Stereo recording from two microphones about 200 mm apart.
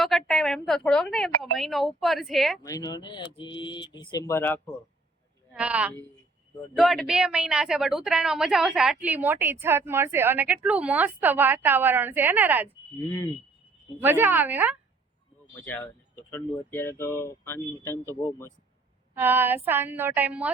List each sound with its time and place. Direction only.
0.0 s a woman's voice: centre (ahead or behind)
2.6 s speech: 20° left (ahead or behind)
5.5 s a woman's voice: 5° right (ahead or behind)
13.0 s speech: 15° left (ahead or behind)
14.0 s a woman's voice: 10° right (ahead or behind)
15.5 s speech: 10° left (ahead or behind)
19.1 s a woman's voice: 10° right (ahead or behind)